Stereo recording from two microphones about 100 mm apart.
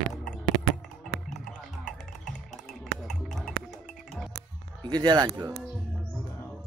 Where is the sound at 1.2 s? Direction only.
5° left (ahead or behind).